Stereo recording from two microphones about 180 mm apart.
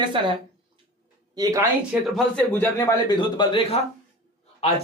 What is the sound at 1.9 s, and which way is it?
Speech, 5° left (ahead or behind).